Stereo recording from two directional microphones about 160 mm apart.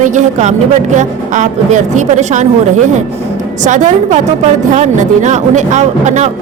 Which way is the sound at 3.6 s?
50° right (ahead or behind).